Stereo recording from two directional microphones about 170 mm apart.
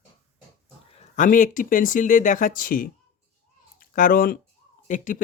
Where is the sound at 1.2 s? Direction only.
50° left (ahead or behind).